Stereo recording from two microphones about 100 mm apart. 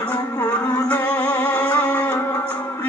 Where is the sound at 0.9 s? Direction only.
15° left (ahead or behind).